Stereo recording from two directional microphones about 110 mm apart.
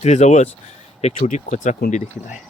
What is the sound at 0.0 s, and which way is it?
Speech, 90° left.